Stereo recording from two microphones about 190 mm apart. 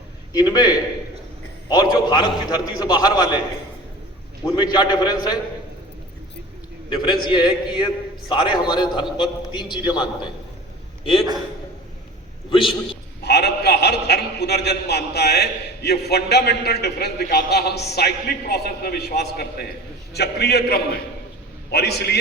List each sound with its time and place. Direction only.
0.3 s a man's voice: 20° left (ahead or behind)
2.0 s a man's voice: 25° left (ahead or behind)
4.5 s a man's voice: 20° left (ahead or behind)
6.9 s a man's voice: 25° left (ahead or behind)
11.0 s a man's voice: 30° left (ahead or behind)
12.5 s a man's voice: 25° left (ahead or behind)
13.2 s a man's voice: 60° left (ahead or behind)